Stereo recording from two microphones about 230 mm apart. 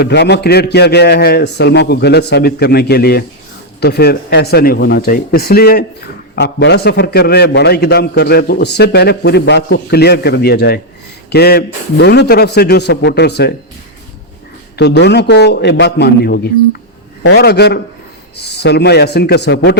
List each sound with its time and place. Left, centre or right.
0.0 s a man's voice: left
14.8 s a man's voice: left